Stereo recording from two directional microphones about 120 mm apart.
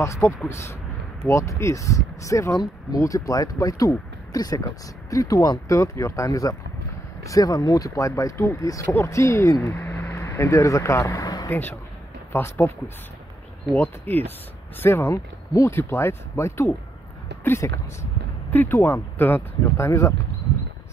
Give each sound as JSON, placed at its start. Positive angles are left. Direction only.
{"t": 0.0, "sound": "speech", "side_deg": 25}
{"t": 1.3, "sound": "speech", "side_deg": 25}
{"t": 12.3, "sound": "speech", "side_deg": 20}